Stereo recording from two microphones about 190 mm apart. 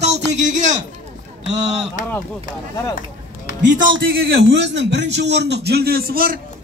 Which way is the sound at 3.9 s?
85° right.